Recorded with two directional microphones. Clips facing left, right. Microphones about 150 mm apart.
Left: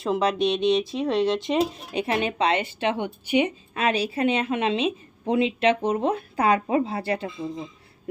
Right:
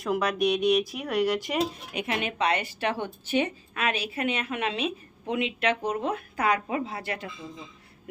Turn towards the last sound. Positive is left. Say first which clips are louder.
# left 8 dB
turn(degrees=30)  # may be behind; listen again after turning